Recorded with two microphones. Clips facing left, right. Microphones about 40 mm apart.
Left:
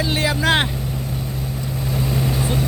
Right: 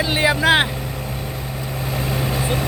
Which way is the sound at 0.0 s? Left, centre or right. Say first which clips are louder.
Right 3 dB; centre.